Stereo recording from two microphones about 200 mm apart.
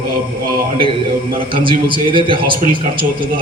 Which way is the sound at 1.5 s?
25° right (ahead or behind).